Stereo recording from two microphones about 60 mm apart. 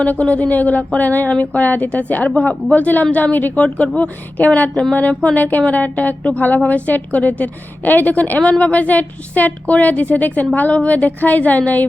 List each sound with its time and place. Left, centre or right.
0.0 s speech: left
4.7 s speech: centre
4.9 s speech: left